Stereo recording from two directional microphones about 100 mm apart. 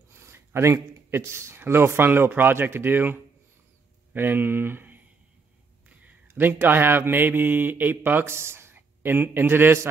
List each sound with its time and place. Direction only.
0.1 s speech: 25° right (ahead or behind)